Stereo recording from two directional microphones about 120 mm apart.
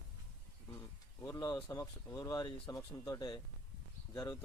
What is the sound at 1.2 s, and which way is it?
Speech, 30° left (ahead or behind).